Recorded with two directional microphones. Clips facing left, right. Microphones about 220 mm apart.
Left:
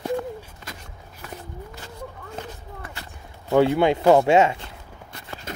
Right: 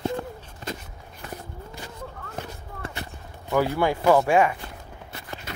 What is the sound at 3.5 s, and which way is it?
Speech, 25° left (ahead or behind).